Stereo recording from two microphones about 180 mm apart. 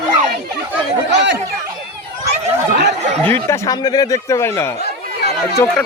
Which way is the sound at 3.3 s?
15° left (ahead or behind).